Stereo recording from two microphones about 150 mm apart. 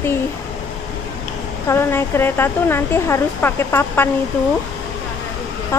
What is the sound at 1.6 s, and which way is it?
A woman's voice, 15° left (ahead or behind).